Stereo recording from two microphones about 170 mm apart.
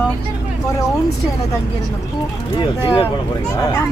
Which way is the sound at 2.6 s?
30° left (ahead or behind).